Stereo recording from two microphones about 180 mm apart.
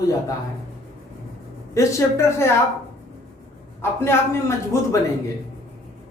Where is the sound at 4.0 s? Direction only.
15° left (ahead or behind).